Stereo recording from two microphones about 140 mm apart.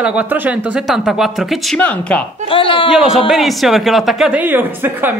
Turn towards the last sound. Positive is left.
turn(degrees=-15)  # may be behind; listen again after turning